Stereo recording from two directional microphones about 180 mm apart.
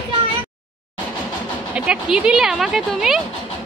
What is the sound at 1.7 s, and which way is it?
Speech, 5° right (ahead or behind).